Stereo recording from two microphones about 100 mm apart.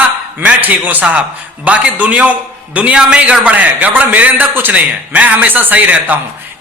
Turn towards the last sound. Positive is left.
turn(degrees=-15)  # may be behind; listen again after turning